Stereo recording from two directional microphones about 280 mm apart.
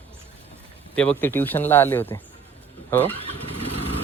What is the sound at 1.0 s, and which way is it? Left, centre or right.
Speech, centre.